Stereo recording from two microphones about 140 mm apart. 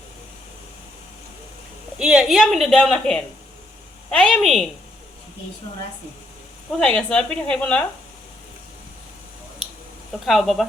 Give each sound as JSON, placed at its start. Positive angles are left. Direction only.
{"t": 2.0, "sound": "a woman's voice", "side_deg": -5}
{"t": 6.7, "sound": "speech", "side_deg": 5}
{"t": 10.2, "sound": "a woman's voice", "side_deg": 0}